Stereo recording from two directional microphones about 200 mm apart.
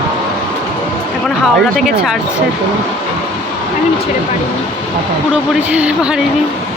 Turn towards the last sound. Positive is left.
turn(degrees=-5)  # may be behind; listen again after turning